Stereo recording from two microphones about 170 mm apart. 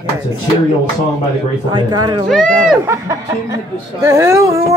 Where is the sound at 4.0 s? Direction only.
20° right (ahead or behind).